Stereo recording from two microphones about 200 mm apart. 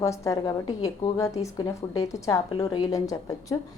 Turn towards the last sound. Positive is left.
turn(degrees=15)  # may be behind; listen again after turning